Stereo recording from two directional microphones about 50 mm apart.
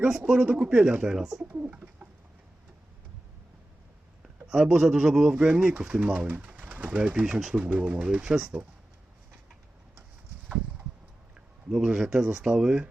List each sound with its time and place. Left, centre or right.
0.3 s speech: centre
1.5 s bird: right
4.4 s speech: centre
11.3 s speech: centre